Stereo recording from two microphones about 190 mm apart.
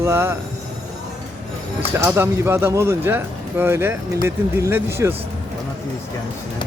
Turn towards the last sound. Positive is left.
turn(degrees=-15)  # may be behind; listen again after turning